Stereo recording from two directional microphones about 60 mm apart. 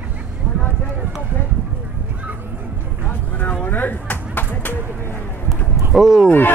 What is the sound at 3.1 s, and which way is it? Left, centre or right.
Vehicle, left.